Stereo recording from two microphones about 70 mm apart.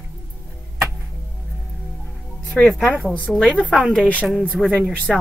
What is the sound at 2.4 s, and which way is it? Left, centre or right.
Music, centre.